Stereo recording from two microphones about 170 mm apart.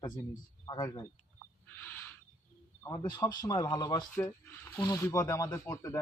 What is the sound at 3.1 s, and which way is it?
Speech, 20° left (ahead or behind).